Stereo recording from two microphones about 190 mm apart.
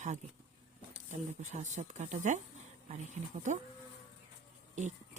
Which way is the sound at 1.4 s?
40° right (ahead or behind).